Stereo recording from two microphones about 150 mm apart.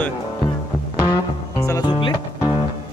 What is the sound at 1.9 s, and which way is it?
Music, 35° left (ahead or behind).